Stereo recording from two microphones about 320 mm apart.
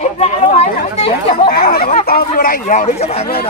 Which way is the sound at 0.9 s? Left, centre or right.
Centre.